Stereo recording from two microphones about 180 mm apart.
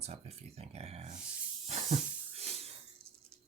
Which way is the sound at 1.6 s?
35° right (ahead or behind).